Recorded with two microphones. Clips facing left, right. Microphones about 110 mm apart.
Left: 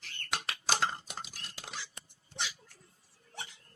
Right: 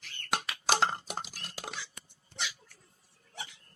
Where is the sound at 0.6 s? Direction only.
70° right (ahead or behind).